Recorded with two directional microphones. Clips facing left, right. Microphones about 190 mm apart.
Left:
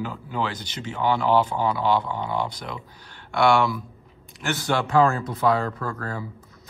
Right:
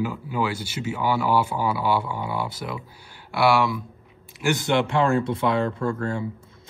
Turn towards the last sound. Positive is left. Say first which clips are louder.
# right 5 dB
turn(degrees=-25)  # may be behind; listen again after turning